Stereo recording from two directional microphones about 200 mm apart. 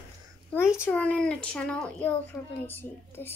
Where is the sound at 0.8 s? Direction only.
5° left (ahead or behind).